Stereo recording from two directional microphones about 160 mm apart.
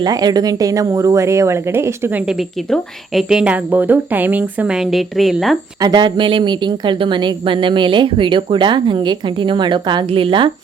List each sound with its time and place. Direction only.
0.0 s a woman's voice: 25° right (ahead or behind); by 5.5 s centre (ahead or behind)
5.8 s speech: 30° right (ahead or behind)